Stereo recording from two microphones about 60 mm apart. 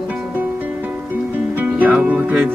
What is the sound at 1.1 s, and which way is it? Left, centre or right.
Music, right.